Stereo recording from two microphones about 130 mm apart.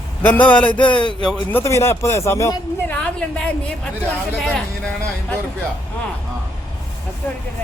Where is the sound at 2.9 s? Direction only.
5° left (ahead or behind).